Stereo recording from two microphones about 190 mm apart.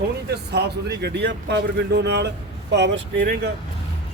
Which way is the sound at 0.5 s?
60° right (ahead or behind).